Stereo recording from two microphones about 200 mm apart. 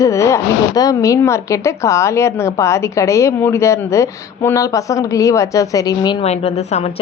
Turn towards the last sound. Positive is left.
turn(degrees=20)  # may be behind; listen again after turning